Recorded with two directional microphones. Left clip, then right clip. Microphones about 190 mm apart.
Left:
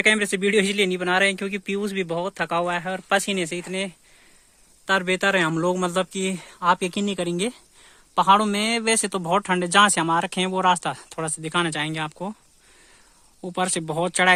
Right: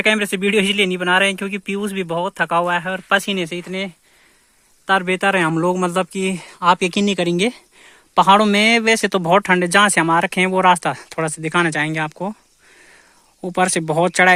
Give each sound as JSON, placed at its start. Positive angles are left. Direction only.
{"t": 0.0, "sound": "a man's voice", "side_deg": -25}
{"t": 13.4, "sound": "a man's voice", "side_deg": -30}